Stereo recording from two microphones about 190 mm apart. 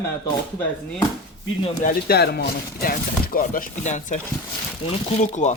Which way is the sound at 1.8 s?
55° left (ahead or behind).